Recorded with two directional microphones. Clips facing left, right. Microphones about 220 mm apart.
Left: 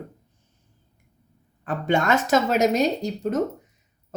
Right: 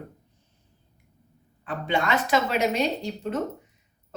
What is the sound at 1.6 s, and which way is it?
Speech, 45° left (ahead or behind).